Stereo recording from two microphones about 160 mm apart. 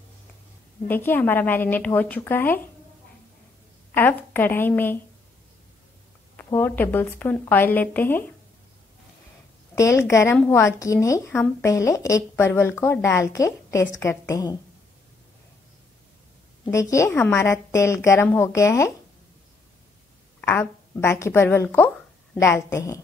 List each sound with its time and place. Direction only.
0.8 s a woman's voice: 10° left (ahead or behind)
3.9 s a woman's voice: 10° left (ahead or behind)
6.3 s a woman's voice: 10° left (ahead or behind)
9.8 s a woman's voice: 20° left (ahead or behind)
16.6 s a woman's voice: 20° left (ahead or behind)
20.3 s a woman's voice: 10° left (ahead or behind)